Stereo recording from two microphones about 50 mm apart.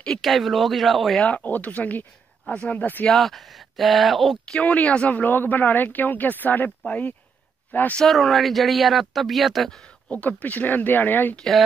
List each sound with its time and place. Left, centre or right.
0.2 s speech: centre
1.2 s speech: left
3.1 s speech: centre
4.6 s speech: left
8.0 s speech: centre
10.0 s speech: left